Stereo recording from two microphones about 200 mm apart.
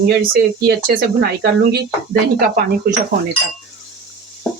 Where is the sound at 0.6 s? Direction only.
55° right (ahead or behind).